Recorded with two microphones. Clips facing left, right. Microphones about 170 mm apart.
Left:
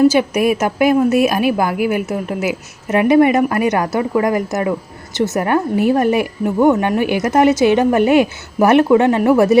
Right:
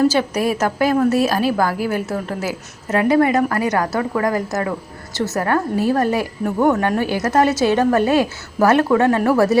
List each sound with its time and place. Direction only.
0.1 s a woman's voice: 15° left (ahead or behind)